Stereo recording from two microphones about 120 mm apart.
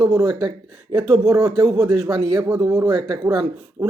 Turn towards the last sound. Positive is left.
turn(degrees=-35)  # may be behind; listen again after turning